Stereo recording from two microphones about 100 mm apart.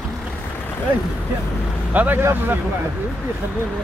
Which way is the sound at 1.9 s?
15° right (ahead or behind).